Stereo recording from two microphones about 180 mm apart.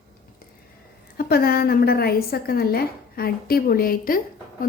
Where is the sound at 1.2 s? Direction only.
60° left (ahead or behind).